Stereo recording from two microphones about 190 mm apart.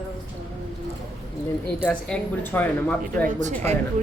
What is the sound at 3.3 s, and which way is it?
Speech, 40° right (ahead or behind).